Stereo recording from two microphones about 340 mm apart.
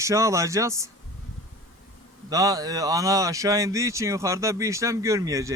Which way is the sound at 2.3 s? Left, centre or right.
Centre.